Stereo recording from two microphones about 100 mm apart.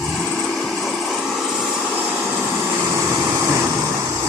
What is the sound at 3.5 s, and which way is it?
Vehicle, 30° right (ahead or behind).